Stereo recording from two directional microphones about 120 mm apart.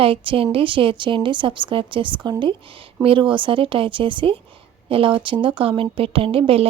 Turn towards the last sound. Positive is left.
turn(degrees=-50)  # may be behind; listen again after turning